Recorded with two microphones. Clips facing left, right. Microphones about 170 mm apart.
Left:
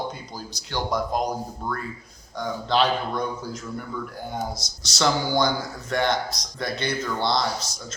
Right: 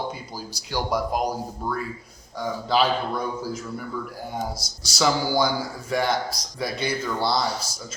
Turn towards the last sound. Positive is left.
turn(degrees=-5)  # may be behind; listen again after turning